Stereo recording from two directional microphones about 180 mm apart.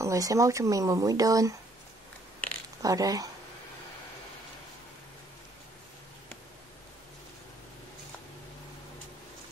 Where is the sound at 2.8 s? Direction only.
20° right (ahead or behind).